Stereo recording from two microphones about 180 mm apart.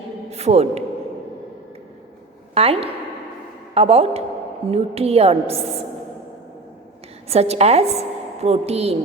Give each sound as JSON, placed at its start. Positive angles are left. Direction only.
{"t": 0.3, "sound": "a man's voice", "side_deg": -35}
{"t": 2.6, "sound": "a woman's voice", "side_deg": -35}
{"t": 7.3, "sound": "a woman's voice", "side_deg": -35}